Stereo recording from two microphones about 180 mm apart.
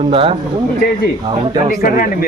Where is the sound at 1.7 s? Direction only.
50° left (ahead or behind).